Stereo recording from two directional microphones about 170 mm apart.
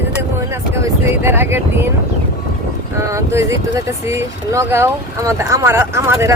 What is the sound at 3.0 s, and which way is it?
Speech, 15° right (ahead or behind).